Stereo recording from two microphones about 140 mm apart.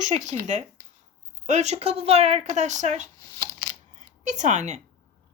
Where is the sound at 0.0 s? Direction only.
55° right (ahead or behind).